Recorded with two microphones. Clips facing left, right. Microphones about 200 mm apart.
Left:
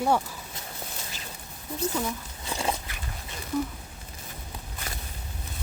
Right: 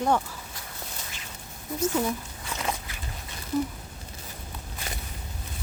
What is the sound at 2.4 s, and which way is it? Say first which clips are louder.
Biting: left 5 dB; 30° left (ahead or behind).